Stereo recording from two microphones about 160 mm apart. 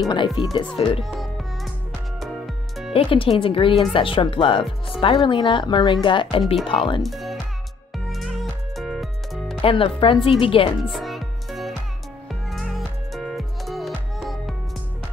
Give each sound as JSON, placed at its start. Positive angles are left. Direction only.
{"t": 0.6, "sound": "speech", "side_deg": 35}
{"t": 1.0, "sound": "music", "side_deg": 0}
{"t": 2.9, "sound": "speech", "side_deg": 35}
{"t": 6.4, "sound": "speech", "side_deg": 0}
{"t": 6.7, "sound": "speech", "side_deg": 35}
{"t": 7.0, "sound": "speech", "side_deg": 0}
{"t": 8.1, "sound": "music", "side_deg": 0}
{"t": 9.6, "sound": "speech", "side_deg": 35}
{"t": 10.8, "sound": "music", "side_deg": 0}